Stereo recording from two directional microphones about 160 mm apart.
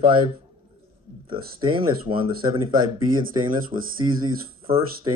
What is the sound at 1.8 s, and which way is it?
Speech, 35° right (ahead or behind).